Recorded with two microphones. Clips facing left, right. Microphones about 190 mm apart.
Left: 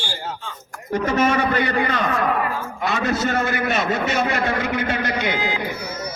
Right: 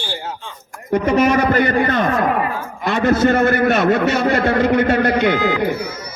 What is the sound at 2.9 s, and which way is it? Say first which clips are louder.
A man's voice: right 8 dB; 55° right (ahead or behind).